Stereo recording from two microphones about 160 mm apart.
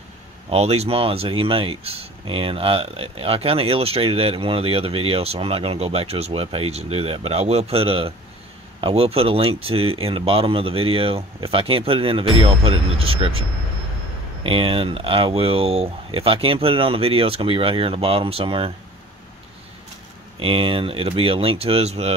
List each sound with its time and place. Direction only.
0.5 s speech: 40° right (ahead or behind)
20.3 s speech: 35° right (ahead or behind)